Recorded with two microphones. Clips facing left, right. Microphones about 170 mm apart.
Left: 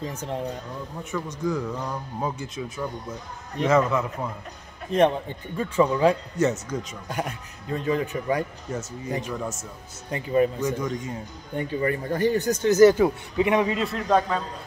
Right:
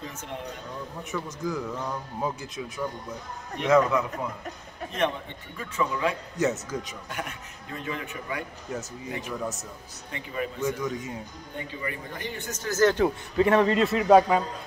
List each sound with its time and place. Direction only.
0.0 s a man's voice: 35° left (ahead or behind)
1.1 s speech: centre (ahead or behind)
3.6 s speech: centre (ahead or behind)
4.9 s a man's voice: 35° left (ahead or behind)
6.3 s speech: centre (ahead or behind)
7.1 s a man's voice: 35° left (ahead or behind)
9.2 s speech: centre (ahead or behind)
10.1 s a man's voice: 35° left (ahead or behind)
10.6 s speech: centre (ahead or behind)
11.5 s speech: 45° left (ahead or behind)
12.6 s a man's voice: 10° left (ahead or behind)
13.7 s speech: 5° right (ahead or behind)